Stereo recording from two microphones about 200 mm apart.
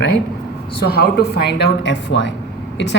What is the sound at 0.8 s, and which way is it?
Speech, 50° left (ahead or behind).